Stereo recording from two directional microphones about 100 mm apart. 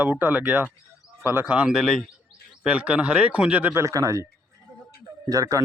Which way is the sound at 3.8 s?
35° right (ahead or behind).